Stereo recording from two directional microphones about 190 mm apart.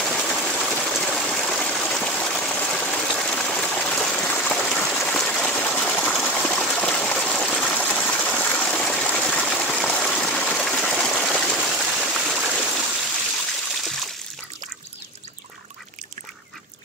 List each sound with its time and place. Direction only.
0.0 s water: centre (ahead or behind)